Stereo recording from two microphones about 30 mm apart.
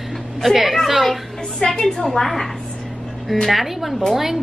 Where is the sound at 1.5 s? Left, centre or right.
Centre.